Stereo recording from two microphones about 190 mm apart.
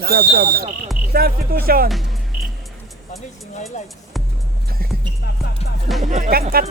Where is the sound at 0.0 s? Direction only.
55° right (ahead or behind).